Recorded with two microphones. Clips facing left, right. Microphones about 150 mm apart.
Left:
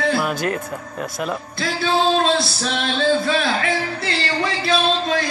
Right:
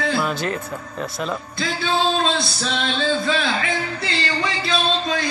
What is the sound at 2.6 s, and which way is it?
A man's voice, 50° left (ahead or behind).